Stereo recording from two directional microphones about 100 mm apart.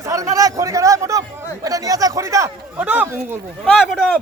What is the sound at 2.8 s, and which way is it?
Speech, 15° right (ahead or behind).